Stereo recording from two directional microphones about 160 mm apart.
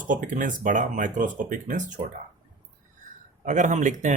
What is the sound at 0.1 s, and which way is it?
Speech, 55° right (ahead or behind).